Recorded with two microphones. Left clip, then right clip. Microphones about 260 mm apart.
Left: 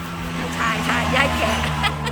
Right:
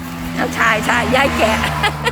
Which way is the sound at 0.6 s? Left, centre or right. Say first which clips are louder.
Right 6 dB; centre.